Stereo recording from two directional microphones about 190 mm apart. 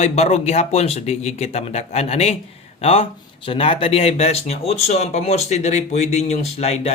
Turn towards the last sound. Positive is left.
turn(degrees=35)  # may be behind; listen again after turning